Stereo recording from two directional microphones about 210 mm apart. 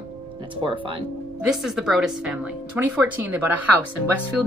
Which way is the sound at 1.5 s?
Centre (ahead or behind).